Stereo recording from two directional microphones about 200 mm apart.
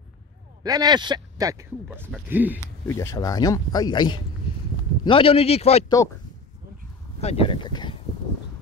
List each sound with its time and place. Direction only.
0.7 s speech: 20° right (ahead or behind)
1.9 s speech: 5° right (ahead or behind)
2.6 s a man's voice: 15° left (ahead or behind); by 5.9 s 30° left (ahead or behind)
7.2 s speech: 30° left (ahead or behind)